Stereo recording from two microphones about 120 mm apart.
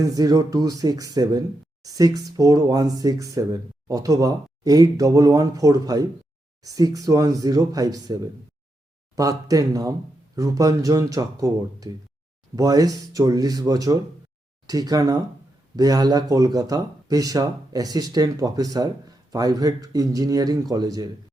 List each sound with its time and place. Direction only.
0.0 s speech: 30° right (ahead or behind)